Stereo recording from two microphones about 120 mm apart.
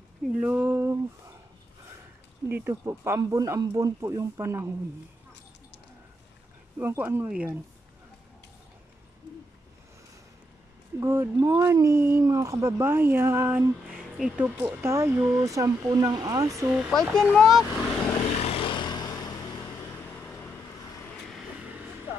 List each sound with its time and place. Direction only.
0.3 s speech: 10° right (ahead or behind)
2.4 s speech: 15° right (ahead or behind)
6.8 s speech: 20° right (ahead or behind)
11.0 s speech: 20° right (ahead or behind)
14.1 s speech: 5° right (ahead or behind)
14.4 s speech: 15° right (ahead or behind)
16.7 s speech: centre (ahead or behind)
18.4 s vehicle: 50° left (ahead or behind); by 19.7 s 35° left (ahead or behind)
20.2 s vehicle: 15° left (ahead or behind)
21.1 s vehicle: centre (ahead or behind)